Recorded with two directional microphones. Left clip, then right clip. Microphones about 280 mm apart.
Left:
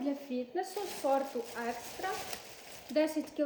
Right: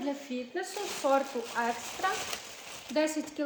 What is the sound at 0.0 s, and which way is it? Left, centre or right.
Speech, centre.